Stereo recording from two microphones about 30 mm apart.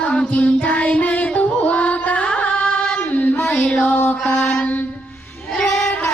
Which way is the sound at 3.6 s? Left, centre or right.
Left.